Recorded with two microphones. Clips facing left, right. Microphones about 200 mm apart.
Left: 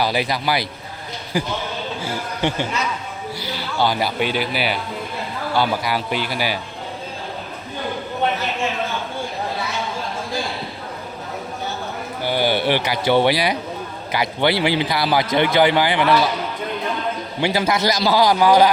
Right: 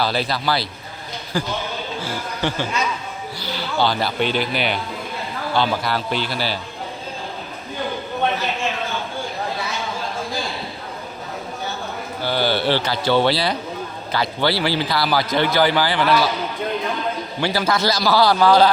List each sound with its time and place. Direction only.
0.0 s speech: 15° left (ahead or behind)
3.4 s speech: 10° left (ahead or behind)
12.2 s a man's voice: 15° left (ahead or behind)
17.4 s speech: 20° left (ahead or behind)